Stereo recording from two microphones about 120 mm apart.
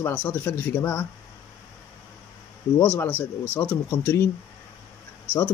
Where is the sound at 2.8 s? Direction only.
15° left (ahead or behind).